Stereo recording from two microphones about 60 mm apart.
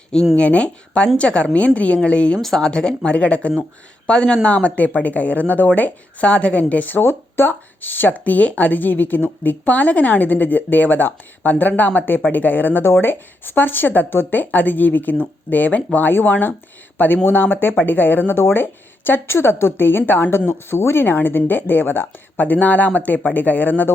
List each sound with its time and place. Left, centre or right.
0.3 s speech: centre
2.4 s speech: centre
2.6 s speech: centre
7.0 s speech: left
20.5 s speech: left